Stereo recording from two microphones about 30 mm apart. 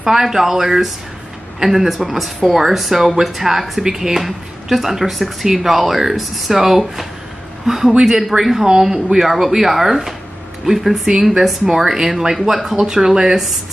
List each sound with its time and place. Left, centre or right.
0.0 s speech: centre
3.8 s speech: centre
12.8 s speech: centre